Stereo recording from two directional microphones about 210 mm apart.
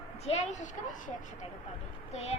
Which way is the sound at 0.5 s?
35° left (ahead or behind).